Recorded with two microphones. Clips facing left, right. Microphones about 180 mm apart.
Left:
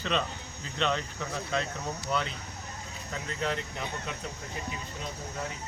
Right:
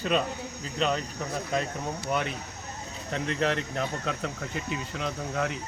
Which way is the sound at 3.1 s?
70° right (ahead or behind).